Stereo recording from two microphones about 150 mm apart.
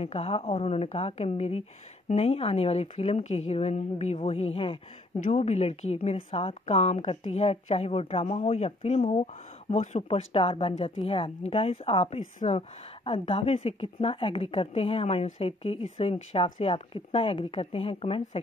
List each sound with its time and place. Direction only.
0.0 s a woman's voice: 45° left (ahead or behind)